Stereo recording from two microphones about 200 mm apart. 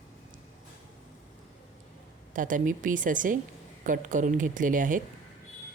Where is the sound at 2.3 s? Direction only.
40° right (ahead or behind).